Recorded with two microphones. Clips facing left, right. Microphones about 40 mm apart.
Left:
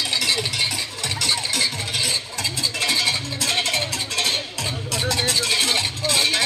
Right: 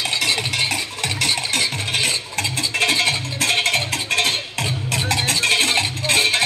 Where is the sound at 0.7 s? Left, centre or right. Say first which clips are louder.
Right 3 dB; right.